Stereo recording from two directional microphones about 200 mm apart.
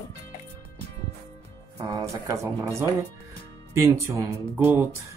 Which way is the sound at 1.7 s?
15° right (ahead or behind).